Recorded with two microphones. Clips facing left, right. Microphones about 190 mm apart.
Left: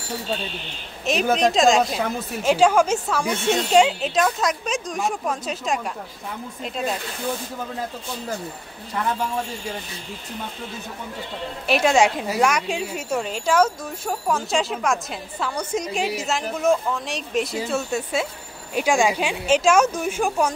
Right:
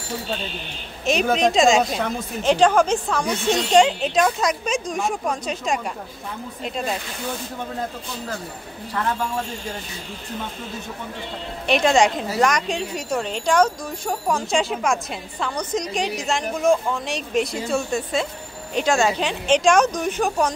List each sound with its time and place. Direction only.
1.0 s a woman's voice: centre (ahead or behind)
11.6 s a woman's voice: 5° left (ahead or behind)